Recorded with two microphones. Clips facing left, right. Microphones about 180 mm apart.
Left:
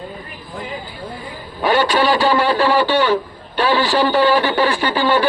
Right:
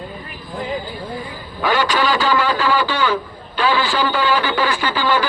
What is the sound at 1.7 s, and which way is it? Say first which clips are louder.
Speech: left 3 dB; 35° left (ahead or behind).